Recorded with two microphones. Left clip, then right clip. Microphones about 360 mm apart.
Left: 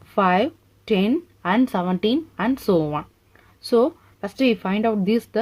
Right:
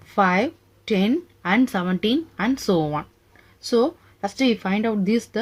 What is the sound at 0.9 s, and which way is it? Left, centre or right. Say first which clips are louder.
Speech: left 1 dB; left.